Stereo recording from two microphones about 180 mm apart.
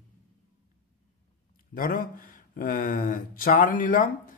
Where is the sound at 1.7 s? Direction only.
50° left (ahead or behind).